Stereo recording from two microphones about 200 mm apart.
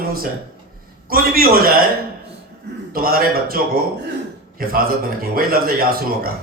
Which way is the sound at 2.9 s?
50° right (ahead or behind).